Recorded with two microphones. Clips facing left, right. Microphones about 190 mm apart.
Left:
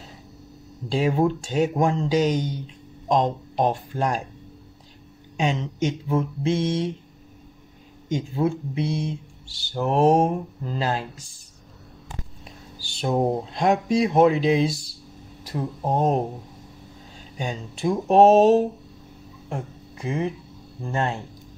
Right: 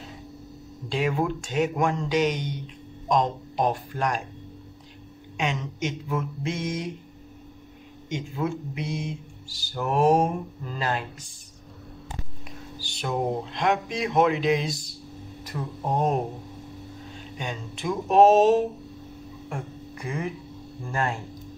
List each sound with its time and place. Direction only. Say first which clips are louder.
0.8 s speech: left 4 dB; 35° left (ahead or behind)
5.4 s speech: left 5 dB; 35° left (ahead or behind)
8.1 s speech: left 5 dB; 35° left (ahead or behind)
13.0 s speech: left 4 dB; 35° left (ahead or behind)
17.4 s speech: left 5 dB; 35° left (ahead or behind)
19.5 s music: left 3 dB; 25° left (ahead or behind)
20.8 s speech: left 2 dB; 25° left (ahead or behind)